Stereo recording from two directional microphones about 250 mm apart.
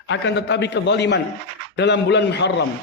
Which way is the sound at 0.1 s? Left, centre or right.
Left.